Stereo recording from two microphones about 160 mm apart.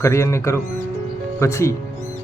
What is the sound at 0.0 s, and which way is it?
A man's voice, 15° left (ahead or behind).